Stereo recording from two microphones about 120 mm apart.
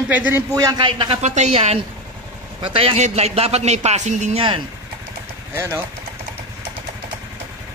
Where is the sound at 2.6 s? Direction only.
50° right (ahead or behind).